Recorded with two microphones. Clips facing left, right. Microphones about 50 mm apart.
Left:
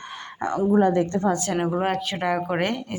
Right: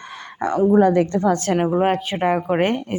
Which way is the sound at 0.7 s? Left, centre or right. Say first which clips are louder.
Right 3 dB; right.